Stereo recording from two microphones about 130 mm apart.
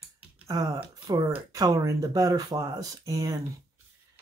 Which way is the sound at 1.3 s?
25° right (ahead or behind).